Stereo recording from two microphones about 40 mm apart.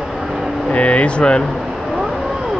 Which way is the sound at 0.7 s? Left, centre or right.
Left.